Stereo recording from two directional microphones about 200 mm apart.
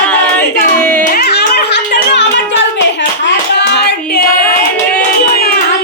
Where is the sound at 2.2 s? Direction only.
60° left (ahead or behind).